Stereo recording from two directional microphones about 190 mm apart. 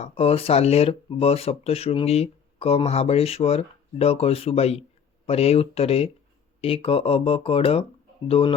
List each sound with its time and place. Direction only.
0.0 s speech: 30° left (ahead or behind)